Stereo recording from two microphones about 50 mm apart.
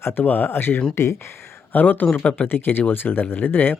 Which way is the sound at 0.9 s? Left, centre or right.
Left.